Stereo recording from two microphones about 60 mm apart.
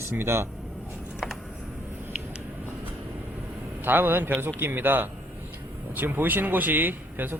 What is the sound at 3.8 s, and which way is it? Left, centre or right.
Speech, right.